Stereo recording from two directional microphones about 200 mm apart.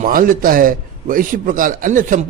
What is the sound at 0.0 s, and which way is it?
A man's voice, 45° right (ahead or behind).